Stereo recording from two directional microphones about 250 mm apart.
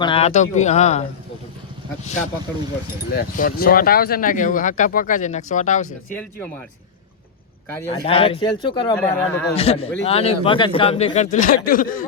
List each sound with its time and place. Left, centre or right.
0.0 s speech: left
3.1 s speech: left
6.1 s speech: centre
7.9 s speech: left
9.0 s speech: centre
9.6 s speech: left